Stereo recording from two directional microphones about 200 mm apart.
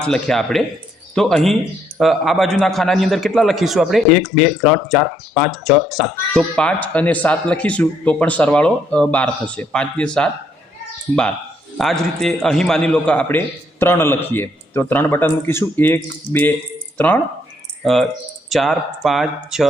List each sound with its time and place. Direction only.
0.0 s a man's voice: centre (ahead or behind)
11.8 s a man's voice: centre (ahead or behind)
17.8 s a man's voice: centre (ahead or behind)